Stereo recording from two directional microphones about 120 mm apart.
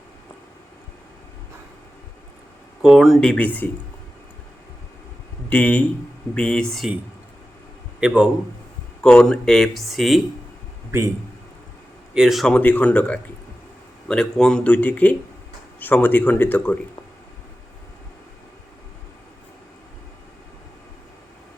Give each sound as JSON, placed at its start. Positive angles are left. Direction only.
{"t": 2.8, "sound": "speech", "side_deg": -5}
{"t": 3.2, "sound": "speech", "side_deg": 10}
{"t": 5.5, "sound": "speech", "side_deg": 15}
{"t": 8.0, "sound": "a man's voice", "side_deg": -5}
{"t": 9.0, "sound": "speech", "side_deg": 5}
{"t": 10.9, "sound": "a man's voice", "side_deg": -25}
{"t": 12.1, "sound": "speech", "side_deg": -5}
{"t": 12.5, "sound": "speech", "side_deg": 15}